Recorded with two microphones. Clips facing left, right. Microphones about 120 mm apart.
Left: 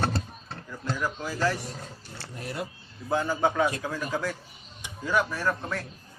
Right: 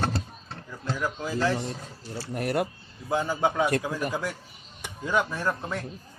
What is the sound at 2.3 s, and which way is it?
Speech, 65° right (ahead or behind).